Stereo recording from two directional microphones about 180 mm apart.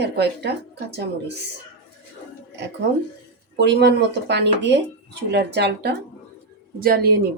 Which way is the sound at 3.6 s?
70° right (ahead or behind).